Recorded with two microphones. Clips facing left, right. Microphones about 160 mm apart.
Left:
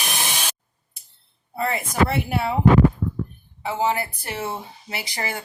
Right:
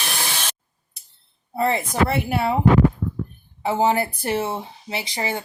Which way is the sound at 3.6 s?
30° right (ahead or behind).